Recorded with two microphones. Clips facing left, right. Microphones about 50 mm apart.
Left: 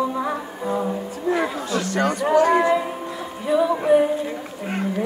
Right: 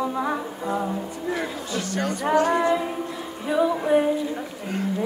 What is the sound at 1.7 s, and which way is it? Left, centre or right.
Chatter, left.